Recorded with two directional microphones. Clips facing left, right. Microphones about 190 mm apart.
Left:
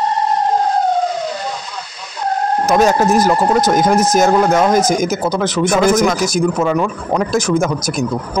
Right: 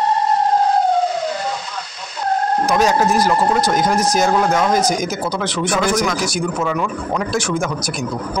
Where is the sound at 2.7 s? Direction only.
50° left (ahead or behind).